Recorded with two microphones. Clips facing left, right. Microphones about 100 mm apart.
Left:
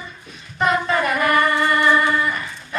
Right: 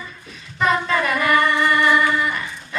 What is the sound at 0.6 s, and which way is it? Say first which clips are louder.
Singing: even; 35° left (ahead or behind).